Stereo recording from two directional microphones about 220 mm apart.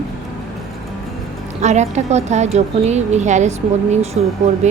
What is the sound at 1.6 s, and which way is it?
A woman's voice, 30° right (ahead or behind).